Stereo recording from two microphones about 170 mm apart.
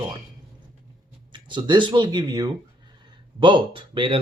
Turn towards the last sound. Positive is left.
turn(degrees=-30)  # may be behind; listen again after turning